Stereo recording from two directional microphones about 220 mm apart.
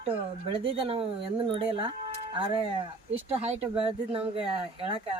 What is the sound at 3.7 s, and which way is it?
Speech, 25° right (ahead or behind).